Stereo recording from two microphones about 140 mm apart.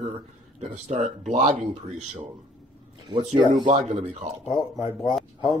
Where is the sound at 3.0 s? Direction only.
35° right (ahead or behind).